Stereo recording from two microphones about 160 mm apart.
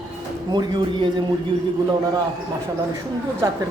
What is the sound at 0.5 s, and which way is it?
Speech, 30° right (ahead or behind).